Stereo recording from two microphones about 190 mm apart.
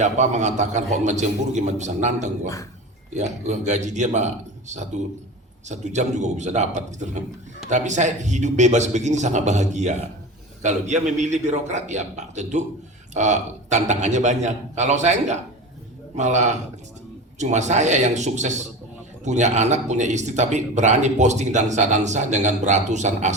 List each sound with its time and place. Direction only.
0.0 s speech: 40° right (ahead or behind)
5.6 s speech: 40° right (ahead or behind)